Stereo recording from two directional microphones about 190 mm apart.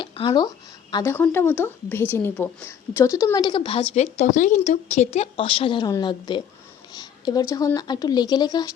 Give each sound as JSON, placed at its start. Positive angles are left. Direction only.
{"t": 0.0, "sound": "speech", "side_deg": 25}
{"t": 6.9, "sound": "a sound", "side_deg": 20}
{"t": 7.5, "sound": "speech", "side_deg": 20}